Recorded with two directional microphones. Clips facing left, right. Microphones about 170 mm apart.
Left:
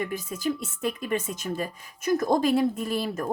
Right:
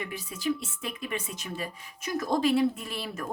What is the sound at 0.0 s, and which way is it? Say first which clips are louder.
Speech: left 4 dB; 45° left (ahead or behind).